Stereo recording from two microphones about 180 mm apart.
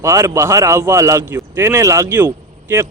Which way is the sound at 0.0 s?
15° right (ahead or behind).